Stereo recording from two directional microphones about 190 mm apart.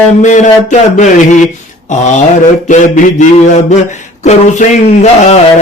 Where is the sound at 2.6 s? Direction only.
40° left (ahead or behind).